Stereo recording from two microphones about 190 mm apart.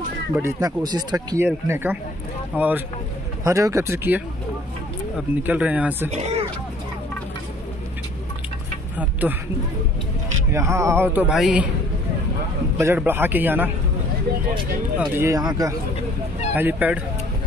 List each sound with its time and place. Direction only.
0.4 s speech: 20° right (ahead or behind)
5.4 s speech: 10° right (ahead or behind)
6.0 s speech: 35° right (ahead or behind)
9.2 s speech: 10° right (ahead or behind)
10.5 s speech: 15° right (ahead or behind)
12.7 s speech: 10° right (ahead or behind)
15.0 s speech: 15° right (ahead or behind)
16.5 s speech: 10° right (ahead or behind)